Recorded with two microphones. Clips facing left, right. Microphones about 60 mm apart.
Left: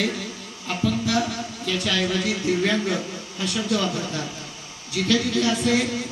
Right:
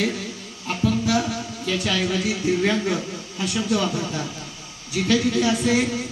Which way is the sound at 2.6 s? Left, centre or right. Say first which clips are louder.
Right 1 dB; right.